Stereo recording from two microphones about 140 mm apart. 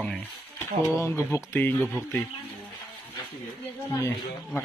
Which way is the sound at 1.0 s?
20° left (ahead or behind).